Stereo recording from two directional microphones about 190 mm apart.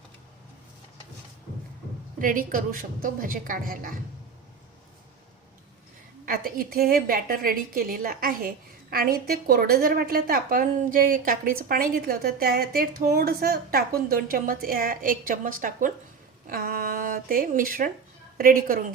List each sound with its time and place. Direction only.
2.1 s a woman's voice: 45° right (ahead or behind)
6.2 s a woman's voice: 50° right (ahead or behind)